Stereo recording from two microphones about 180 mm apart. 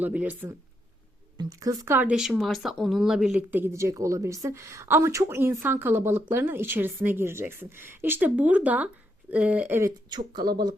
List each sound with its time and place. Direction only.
0.0 s speech: 10° right (ahead or behind)
1.4 s speech: 20° right (ahead or behind)
10.1 s speech: 25° right (ahead or behind)